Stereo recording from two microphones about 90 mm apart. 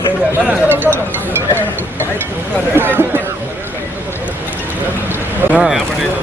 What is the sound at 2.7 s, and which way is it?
Speech, 25° right (ahead or behind).